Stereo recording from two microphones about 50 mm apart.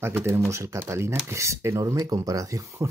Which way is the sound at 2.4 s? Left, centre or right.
Right.